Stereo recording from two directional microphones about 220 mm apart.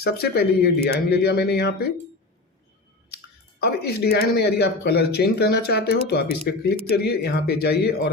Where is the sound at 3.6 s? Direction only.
45° left (ahead or behind).